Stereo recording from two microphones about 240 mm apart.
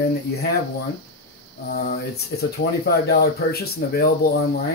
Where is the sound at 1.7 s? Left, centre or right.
Left.